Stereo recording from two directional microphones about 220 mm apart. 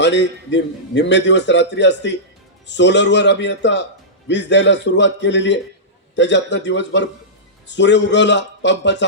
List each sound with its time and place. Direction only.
0.0 s a man's voice: 55° left (ahead or behind)